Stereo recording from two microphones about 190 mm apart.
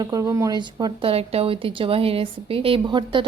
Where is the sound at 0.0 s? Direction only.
20° right (ahead or behind).